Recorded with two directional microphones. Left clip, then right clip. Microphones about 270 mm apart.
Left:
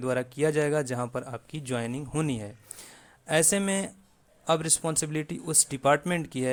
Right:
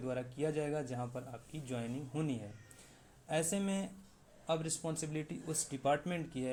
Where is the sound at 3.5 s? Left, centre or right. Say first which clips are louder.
Left 11 dB; left.